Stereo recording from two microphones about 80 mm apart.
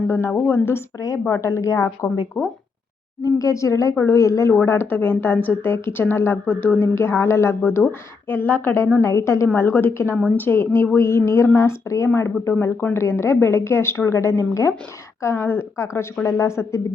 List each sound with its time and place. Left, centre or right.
0.1 s a woman's voice: left
3.2 s a woman's voice: left
9.6 s a woman's voice: left